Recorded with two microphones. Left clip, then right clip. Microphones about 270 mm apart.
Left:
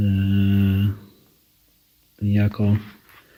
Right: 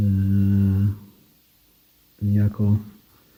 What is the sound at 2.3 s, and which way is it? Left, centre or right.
Speech, centre.